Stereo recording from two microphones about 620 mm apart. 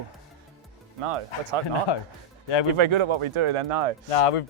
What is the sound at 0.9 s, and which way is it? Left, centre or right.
Speech, right.